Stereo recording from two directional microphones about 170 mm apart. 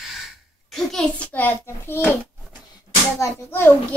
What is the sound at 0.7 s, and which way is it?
A child's voice, centre (ahead or behind).